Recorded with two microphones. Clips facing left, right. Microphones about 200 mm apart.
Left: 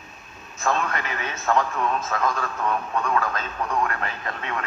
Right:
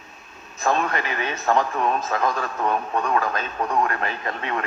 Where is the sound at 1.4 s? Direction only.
30° right (ahead or behind).